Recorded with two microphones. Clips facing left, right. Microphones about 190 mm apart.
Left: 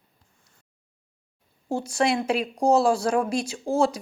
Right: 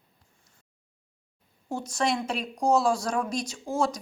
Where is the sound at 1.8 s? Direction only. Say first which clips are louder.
Left 3 dB; 10° left (ahead or behind).